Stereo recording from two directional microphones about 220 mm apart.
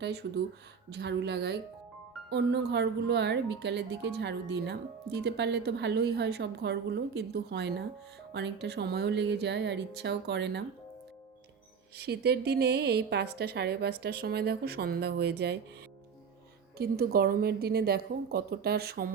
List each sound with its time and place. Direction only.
0.0 s speech: 50° right (ahead or behind)
11.9 s speech: 45° right (ahead or behind)
16.7 s speech: 45° right (ahead or behind)